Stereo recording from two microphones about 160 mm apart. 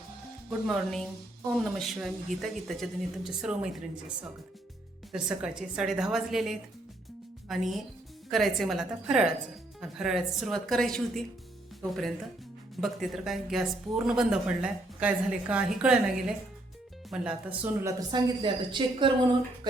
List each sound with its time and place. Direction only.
0.7 s a woman's voice: centre (ahead or behind)
5.1 s a woman's voice: 5° right (ahead or behind)
17.8 s speech: 30° right (ahead or behind)